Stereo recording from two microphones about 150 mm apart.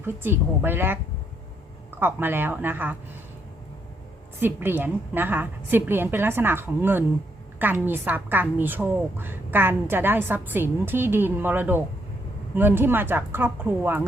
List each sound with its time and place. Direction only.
0.0 s a woman's voice: 15° right (ahead or behind)
2.0 s a woman's voice: 15° right (ahead or behind)
4.4 s a woman's voice: 15° right (ahead or behind)